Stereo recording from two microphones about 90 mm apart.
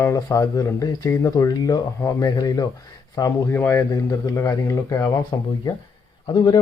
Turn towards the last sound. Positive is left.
turn(degrees=60)  # may be behind; listen again after turning